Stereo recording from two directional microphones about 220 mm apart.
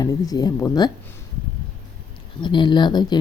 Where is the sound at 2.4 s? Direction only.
20° left (ahead or behind).